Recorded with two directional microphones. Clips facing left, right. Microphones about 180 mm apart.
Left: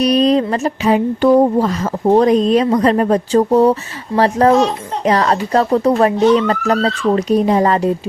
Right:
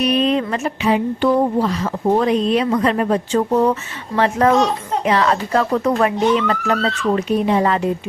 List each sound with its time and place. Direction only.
0.0 s speech: 35° left (ahead or behind)